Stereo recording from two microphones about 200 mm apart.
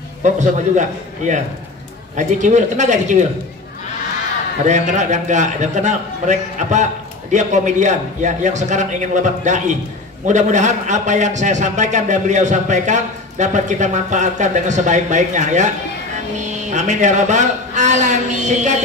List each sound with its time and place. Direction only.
0.2 s a man's voice: 35° right (ahead or behind)
4.6 s a man's voice: 35° right (ahead or behind)